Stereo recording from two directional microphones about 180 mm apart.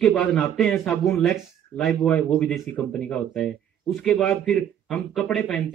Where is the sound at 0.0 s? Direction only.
5° left (ahead or behind).